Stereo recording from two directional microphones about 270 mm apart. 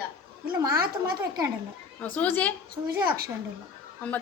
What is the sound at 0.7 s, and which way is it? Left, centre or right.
Speech, right.